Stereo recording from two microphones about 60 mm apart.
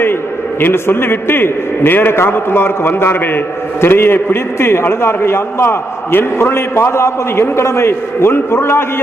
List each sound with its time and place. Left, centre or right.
0.6 s a man's voice: left